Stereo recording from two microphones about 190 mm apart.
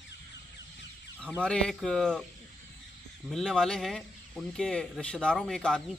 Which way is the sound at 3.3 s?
5° left (ahead or behind).